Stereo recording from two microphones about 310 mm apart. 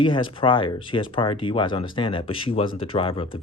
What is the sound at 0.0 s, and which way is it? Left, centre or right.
Speech, centre.